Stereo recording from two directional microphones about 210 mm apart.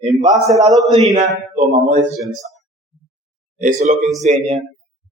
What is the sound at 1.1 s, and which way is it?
Speech, 35° right (ahead or behind).